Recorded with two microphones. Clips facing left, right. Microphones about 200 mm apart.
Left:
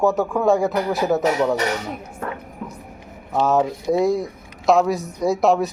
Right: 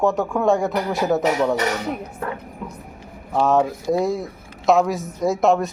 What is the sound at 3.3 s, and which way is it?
Speech, centre (ahead or behind).